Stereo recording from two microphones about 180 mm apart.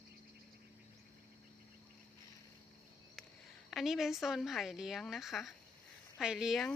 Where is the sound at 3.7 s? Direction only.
Centre (ahead or behind).